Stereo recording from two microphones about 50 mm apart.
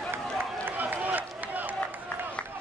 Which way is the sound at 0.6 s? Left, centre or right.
Right.